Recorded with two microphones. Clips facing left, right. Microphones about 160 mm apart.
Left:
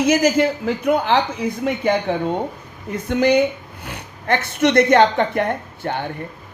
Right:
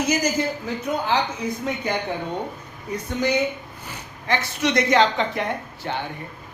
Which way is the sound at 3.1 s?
65° left (ahead or behind).